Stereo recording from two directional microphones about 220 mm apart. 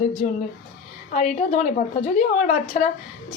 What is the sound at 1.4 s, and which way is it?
A woman's voice, 35° left (ahead or behind).